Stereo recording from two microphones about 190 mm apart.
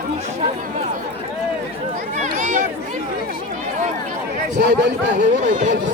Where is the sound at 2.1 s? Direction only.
40° right (ahead or behind).